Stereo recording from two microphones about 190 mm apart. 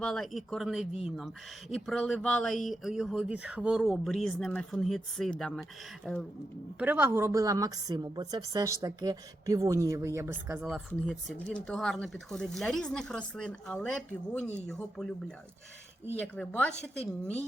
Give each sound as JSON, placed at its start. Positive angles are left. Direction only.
{"t": 0.0, "sound": "speech", "side_deg": 0}
{"t": 6.7, "sound": "a woman's voice", "side_deg": -10}
{"t": 10.6, "sound": "speech", "side_deg": 0}
{"t": 16.1, "sound": "speech", "side_deg": 5}